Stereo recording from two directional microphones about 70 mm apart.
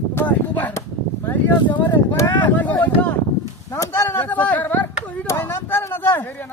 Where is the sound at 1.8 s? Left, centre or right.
Left.